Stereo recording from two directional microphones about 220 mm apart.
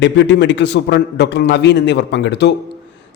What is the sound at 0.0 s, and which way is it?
A man's voice, 55° left (ahead or behind).